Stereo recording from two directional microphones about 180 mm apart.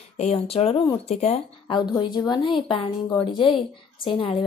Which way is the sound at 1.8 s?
25° left (ahead or behind).